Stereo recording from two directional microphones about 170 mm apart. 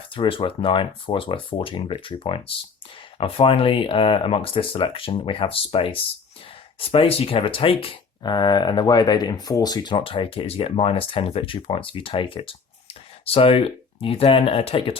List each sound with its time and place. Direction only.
0.1 s speech: 30° left (ahead or behind)